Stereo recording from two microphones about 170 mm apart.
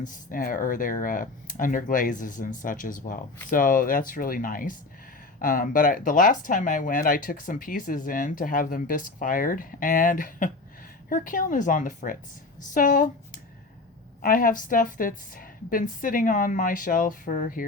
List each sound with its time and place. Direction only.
0.0 s speech: 55° left (ahead or behind)